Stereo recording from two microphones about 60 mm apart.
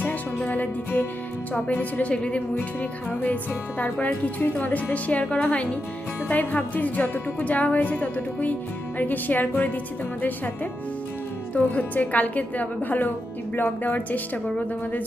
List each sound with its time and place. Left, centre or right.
0.0 s music: left
1.5 s a woman's voice: left
3.1 s music: left
3.8 s a woman's voice: left